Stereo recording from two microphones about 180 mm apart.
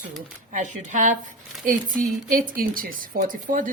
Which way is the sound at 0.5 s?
45° right (ahead or behind).